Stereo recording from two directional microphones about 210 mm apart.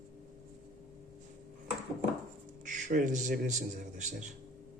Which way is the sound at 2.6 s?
40° right (ahead or behind).